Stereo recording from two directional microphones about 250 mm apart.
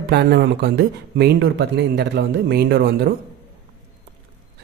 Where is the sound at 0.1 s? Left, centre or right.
Right.